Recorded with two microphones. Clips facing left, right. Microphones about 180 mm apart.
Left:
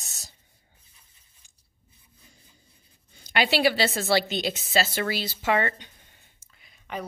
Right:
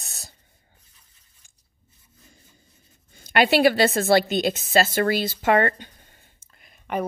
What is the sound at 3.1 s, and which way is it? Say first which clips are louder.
A woman's voice: right 5 dB; 55° right (ahead or behind).